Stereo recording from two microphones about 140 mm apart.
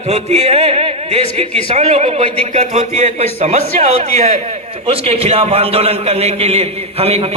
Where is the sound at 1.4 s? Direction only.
50° right (ahead or behind).